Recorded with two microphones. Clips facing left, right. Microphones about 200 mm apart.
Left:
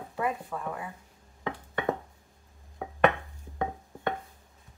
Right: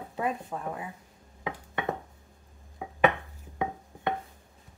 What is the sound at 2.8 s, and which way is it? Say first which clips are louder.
Dishes: even; 5° right (ahead or behind).